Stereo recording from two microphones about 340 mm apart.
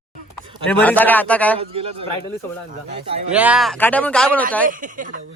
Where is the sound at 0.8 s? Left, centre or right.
Centre.